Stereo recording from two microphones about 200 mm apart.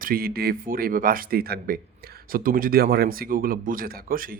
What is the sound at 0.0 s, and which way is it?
Speech, 50° right (ahead or behind).